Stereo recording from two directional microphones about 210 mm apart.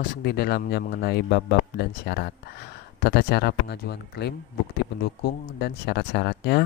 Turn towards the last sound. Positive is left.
turn(degrees=55)  # may be behind; listen again after turning